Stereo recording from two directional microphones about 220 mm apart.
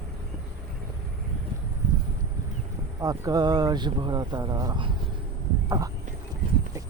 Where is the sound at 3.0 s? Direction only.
15° right (ahead or behind).